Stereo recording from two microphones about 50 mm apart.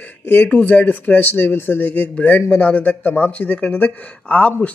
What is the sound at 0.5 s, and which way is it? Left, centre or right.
Speech, left.